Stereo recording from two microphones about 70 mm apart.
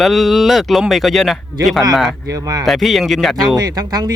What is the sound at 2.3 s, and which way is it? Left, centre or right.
Speech, right.